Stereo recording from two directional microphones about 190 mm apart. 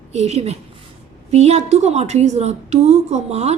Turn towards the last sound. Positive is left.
turn(degrees=-35)  # may be behind; listen again after turning